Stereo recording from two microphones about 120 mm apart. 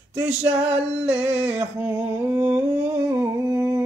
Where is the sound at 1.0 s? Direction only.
10° right (ahead or behind).